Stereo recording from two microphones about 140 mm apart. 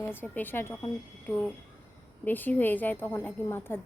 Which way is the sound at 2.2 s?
15° left (ahead or behind).